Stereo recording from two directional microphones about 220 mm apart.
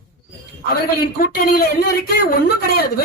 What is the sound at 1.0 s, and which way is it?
Speech, 40° left (ahead or behind).